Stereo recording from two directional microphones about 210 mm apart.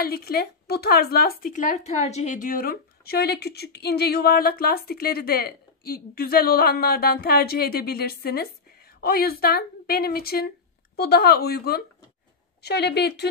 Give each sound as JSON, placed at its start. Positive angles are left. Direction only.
{"t": 0.0, "sound": "speech", "side_deg": 45}